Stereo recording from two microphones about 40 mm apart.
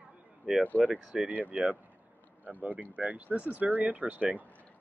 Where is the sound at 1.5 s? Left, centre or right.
Right.